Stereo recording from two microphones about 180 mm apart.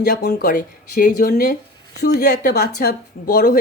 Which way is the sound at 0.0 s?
60° left (ahead or behind).